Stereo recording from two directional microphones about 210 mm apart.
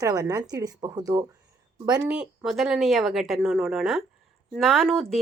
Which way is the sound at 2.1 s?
5° right (ahead or behind).